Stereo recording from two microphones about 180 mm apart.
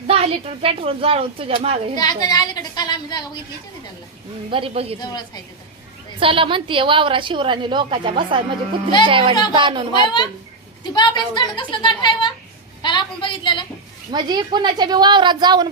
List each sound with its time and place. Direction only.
0.1 s a woman's voice: 35° right (ahead or behind)
2.0 s a woman's voice: 20° left (ahead or behind)
4.5 s a woman's voice: 30° right (ahead or behind)
4.9 s a woman's voice: 25° left (ahead or behind)
6.1 s a woman's voice: 30° right (ahead or behind)
9.9 s a woman's voice: 25° left (ahead or behind)
14.1 s a woman's voice: 25° right (ahead or behind)